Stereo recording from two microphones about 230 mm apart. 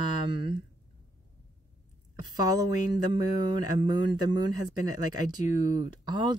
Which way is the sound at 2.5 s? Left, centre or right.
Centre.